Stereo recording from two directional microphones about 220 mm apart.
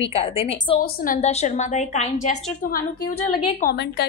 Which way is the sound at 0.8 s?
35° left (ahead or behind).